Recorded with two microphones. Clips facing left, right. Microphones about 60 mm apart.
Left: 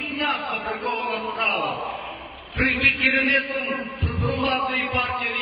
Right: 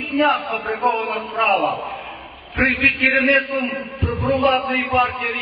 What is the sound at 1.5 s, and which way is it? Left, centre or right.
Speech, right.